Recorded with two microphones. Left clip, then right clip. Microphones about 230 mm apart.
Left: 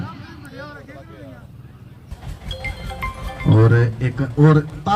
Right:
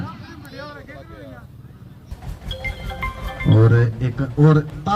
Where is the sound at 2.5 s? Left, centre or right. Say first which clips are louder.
Right 1 dB; centre.